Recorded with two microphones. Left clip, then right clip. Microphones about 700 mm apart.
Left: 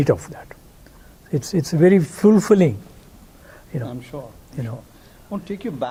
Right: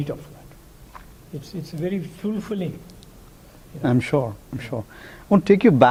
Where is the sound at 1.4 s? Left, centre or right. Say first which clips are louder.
Left 13 dB; left.